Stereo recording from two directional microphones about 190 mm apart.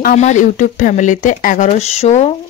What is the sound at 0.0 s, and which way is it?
Speech, 40° left (ahead or behind).